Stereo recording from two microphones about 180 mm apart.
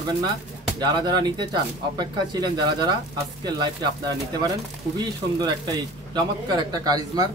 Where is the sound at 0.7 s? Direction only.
25° right (ahead or behind).